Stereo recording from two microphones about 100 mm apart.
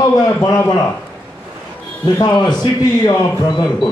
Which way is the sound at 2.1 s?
45° left (ahead or behind).